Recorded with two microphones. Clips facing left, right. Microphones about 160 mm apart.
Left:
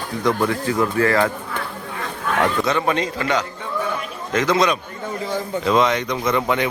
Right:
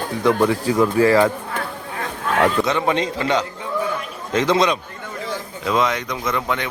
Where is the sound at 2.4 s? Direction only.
20° right (ahead or behind).